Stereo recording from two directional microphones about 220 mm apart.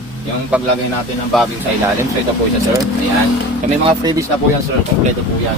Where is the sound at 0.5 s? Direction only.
5° right (ahead or behind).